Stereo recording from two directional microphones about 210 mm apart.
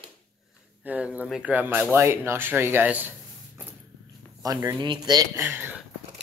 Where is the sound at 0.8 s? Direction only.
5° right (ahead or behind).